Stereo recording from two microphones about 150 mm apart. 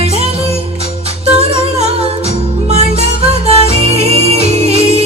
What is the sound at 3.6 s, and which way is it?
Music, 45° right (ahead or behind).